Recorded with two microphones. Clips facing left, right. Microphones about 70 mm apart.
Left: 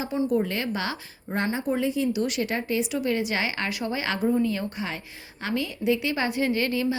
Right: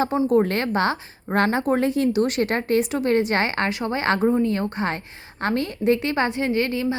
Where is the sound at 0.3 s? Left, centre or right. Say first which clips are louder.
Right 6 dB; right.